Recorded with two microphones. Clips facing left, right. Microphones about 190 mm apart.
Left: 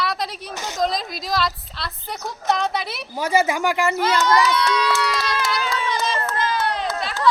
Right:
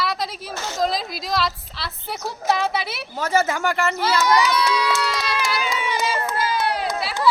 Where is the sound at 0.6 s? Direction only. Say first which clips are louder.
Even; 15° left (ahead or behind).